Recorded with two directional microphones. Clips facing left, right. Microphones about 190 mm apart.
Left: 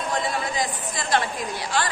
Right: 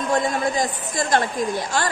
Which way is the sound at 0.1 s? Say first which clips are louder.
Right 7 dB; 45° right (ahead or behind).